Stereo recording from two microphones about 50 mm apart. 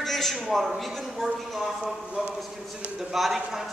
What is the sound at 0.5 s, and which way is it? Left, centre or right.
Speech, centre.